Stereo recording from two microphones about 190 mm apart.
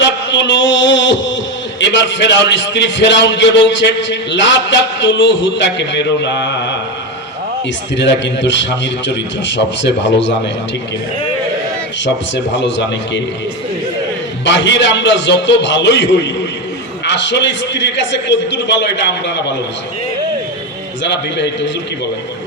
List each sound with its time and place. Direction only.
0.0 s a sound: 70° left (ahead or behind)
1.8 s a man's voice: 70° left (ahead or behind)
7.9 s a man's voice: 70° left (ahead or behind)
12.0 s a man's voice: 70° left (ahead or behind)
14.4 s a man's voice: 70° left (ahead or behind)
21.0 s a man's voice: 65° left (ahead or behind)